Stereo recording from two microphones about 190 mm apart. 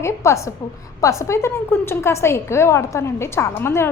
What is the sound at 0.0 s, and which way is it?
A woman's voice, 15° left (ahead or behind).